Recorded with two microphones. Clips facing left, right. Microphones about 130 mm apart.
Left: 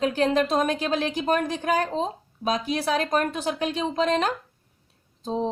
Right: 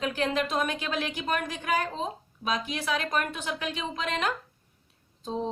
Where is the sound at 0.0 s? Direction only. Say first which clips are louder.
Left 6 dB; 35° left (ahead or behind).